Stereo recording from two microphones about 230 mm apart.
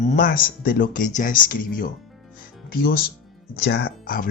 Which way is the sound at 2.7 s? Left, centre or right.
Left.